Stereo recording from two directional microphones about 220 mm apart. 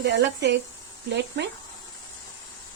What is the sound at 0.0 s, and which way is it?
Speech, 50° right (ahead or behind).